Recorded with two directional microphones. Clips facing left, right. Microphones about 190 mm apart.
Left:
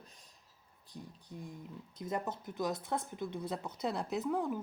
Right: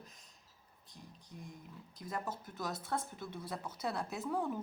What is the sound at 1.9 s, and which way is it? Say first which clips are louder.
Speech: left 4 dB; 20° left (ahead or behind).